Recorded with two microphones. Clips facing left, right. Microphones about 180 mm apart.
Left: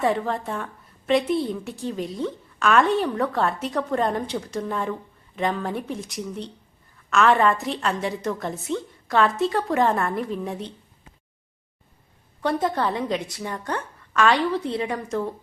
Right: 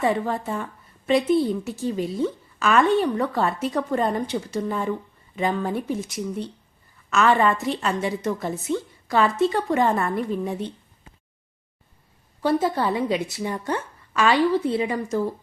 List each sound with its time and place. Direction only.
0.0 s a woman's voice: centre (ahead or behind)
12.4 s a woman's voice: 5° right (ahead or behind)